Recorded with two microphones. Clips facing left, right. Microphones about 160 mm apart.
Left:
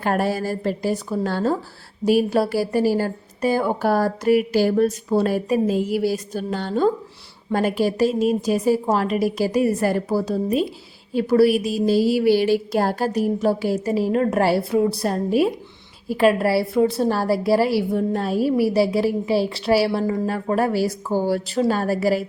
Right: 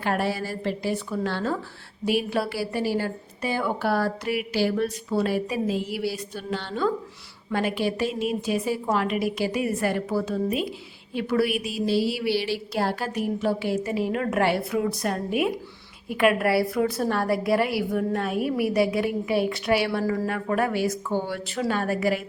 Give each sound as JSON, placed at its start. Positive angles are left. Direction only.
{"t": 0.0, "sound": "a woman's voice", "side_deg": 45}